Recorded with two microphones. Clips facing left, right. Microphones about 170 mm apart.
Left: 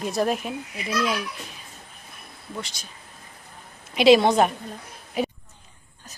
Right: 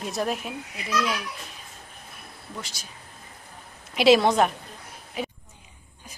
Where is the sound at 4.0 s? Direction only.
Centre (ahead or behind).